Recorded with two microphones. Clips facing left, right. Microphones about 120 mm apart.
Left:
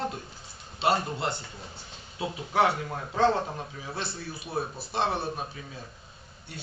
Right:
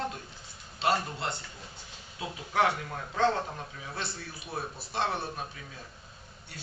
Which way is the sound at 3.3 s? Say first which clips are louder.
Left 4 dB; 30° left (ahead or behind).